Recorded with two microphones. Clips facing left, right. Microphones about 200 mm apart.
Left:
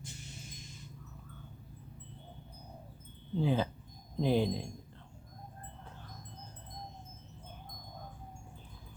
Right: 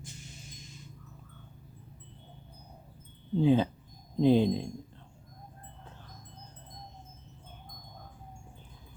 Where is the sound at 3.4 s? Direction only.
20° right (ahead or behind).